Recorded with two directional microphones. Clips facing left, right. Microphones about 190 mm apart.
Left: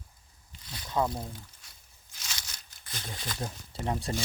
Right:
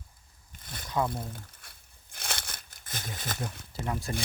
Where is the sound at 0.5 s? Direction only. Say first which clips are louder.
Even; 50° right (ahead or behind).